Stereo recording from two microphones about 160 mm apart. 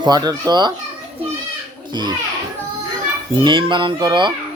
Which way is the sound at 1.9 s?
30° right (ahead or behind).